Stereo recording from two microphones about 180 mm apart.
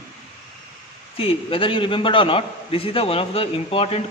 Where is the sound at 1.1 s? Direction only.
30° left (ahead or behind).